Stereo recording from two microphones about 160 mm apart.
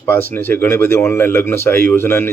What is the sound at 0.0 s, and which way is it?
Speech, 15° left (ahead or behind).